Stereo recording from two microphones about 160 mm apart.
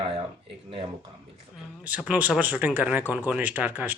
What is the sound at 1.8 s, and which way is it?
Speech, 10° right (ahead or behind).